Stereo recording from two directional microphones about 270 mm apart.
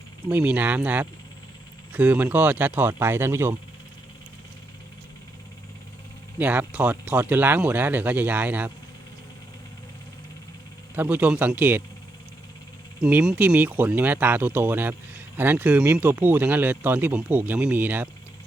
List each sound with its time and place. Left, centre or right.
0.3 s speech: centre
6.4 s speech: centre
10.9 s speech: centre
13.0 s speech: centre